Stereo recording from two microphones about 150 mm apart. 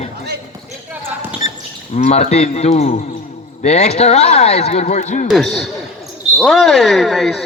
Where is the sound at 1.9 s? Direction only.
45° left (ahead or behind).